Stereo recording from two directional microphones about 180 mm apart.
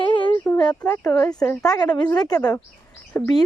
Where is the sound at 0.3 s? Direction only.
15° left (ahead or behind).